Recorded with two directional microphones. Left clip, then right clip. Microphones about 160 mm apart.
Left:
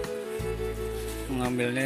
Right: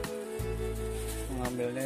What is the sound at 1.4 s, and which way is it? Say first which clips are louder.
Speech: left 5 dB; centre (ahead or behind).